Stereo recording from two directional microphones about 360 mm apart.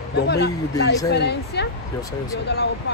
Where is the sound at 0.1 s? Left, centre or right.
Left.